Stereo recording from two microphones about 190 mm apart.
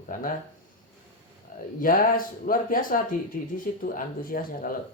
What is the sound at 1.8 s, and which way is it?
Speech, 45° left (ahead or behind).